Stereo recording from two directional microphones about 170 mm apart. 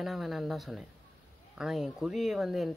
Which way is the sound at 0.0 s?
Centre (ahead or behind).